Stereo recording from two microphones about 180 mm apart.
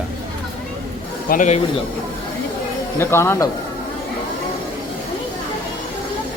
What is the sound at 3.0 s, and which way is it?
Speech, 15° left (ahead or behind).